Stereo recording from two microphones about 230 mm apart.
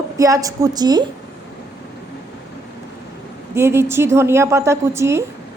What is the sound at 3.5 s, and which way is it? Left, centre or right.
Speech, centre.